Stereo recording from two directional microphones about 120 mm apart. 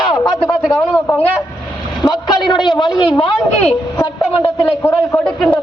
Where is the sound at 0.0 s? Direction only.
40° left (ahead or behind).